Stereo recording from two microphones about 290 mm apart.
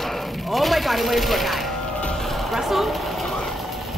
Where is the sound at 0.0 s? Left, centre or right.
Centre.